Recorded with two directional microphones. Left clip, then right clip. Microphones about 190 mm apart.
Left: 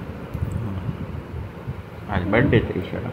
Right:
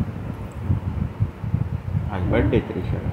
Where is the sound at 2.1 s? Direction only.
25° left (ahead or behind).